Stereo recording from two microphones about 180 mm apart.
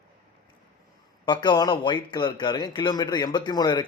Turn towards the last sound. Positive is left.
turn(degrees=20)  # may be behind; listen again after turning